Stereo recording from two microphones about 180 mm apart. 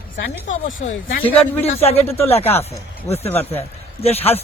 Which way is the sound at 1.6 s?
35° left (ahead or behind).